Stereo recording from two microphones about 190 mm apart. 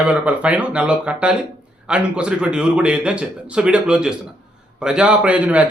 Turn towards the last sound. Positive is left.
turn(degrees=-10)  # may be behind; listen again after turning